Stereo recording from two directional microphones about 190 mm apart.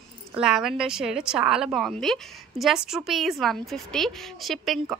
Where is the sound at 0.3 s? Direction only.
Centre (ahead or behind).